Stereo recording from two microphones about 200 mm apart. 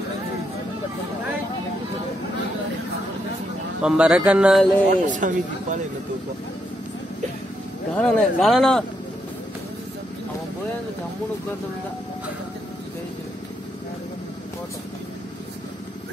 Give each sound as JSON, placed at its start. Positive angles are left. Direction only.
{"t": 3.8, "sound": "speech", "side_deg": -5}
{"t": 4.8, "sound": "speech", "side_deg": -40}
{"t": 7.9, "sound": "speech", "side_deg": 5}